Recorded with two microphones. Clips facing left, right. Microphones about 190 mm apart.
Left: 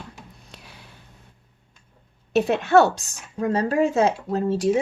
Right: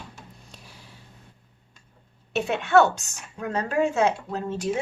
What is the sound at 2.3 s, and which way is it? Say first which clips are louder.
A woman's voice: left 3 dB; 40° left (ahead or behind).